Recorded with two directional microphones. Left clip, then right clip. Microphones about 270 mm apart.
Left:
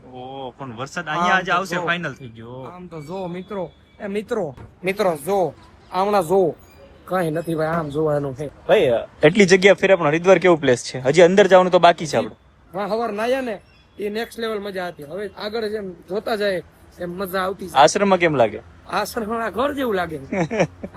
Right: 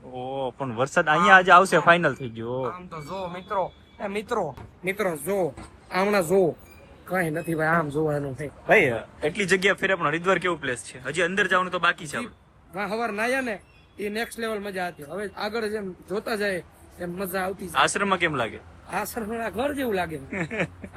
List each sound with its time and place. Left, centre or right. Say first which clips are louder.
0.1 s a sound: right 3 dB; centre
0.9 s a man's voice: right 3 dB; centre
4.8 s speech: left 7 dB; left
5.2 s a man's voice: left 6 dB; centre
12.7 s a man's voice: left 5 dB; centre